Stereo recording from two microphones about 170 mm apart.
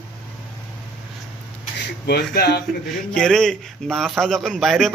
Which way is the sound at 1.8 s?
80° left.